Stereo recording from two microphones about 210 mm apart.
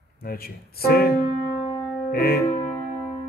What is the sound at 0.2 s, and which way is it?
Speech, 45° left (ahead or behind).